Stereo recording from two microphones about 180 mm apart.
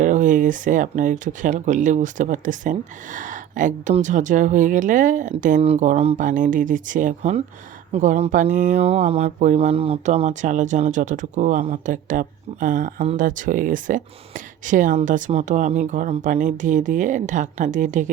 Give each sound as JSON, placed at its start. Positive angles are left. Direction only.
{"t": 0.0, "sound": "speech", "side_deg": -45}